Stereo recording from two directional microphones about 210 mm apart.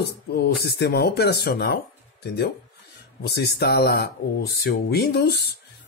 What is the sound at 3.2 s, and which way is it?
Speech, 50° left (ahead or behind).